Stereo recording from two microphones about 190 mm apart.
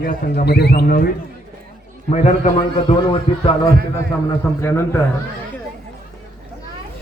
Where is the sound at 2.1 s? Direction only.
35° left (ahead or behind).